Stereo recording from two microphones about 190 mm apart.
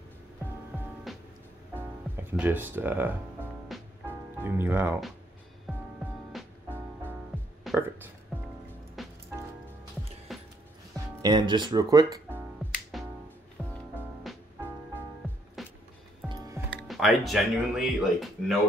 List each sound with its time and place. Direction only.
1.1 s music: centre (ahead or behind)
1.8 s speech: 10° right (ahead or behind)
3.6 s music: centre (ahead or behind)
4.1 s speech: 10° right (ahead or behind)
5.7 s music: centre (ahead or behind)
7.7 s a sound: centre (ahead or behind)
9.0 s music: centre (ahead or behind)
10.3 s music: centre (ahead or behind)
11.2 s speech: 20° right (ahead or behind)
12.9 s music: centre (ahead or behind)
14.3 s music: centre (ahead or behind)
15.6 s music: centre (ahead or behind)
16.3 s music: 15° right (ahead or behind)
16.7 s speech: centre (ahead or behind)